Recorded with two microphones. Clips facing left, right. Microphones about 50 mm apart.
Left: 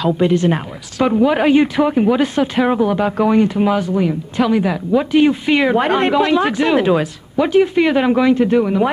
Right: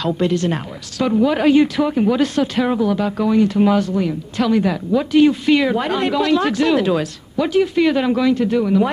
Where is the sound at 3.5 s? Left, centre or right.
Centre.